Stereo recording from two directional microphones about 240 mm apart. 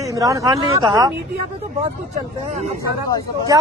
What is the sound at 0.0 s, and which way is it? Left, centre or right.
A man's voice, centre.